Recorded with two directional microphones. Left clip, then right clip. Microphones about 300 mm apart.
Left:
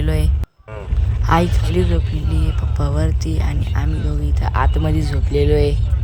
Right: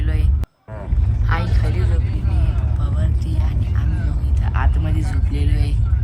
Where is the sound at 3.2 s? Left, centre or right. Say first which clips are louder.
Left 5 dB; centre.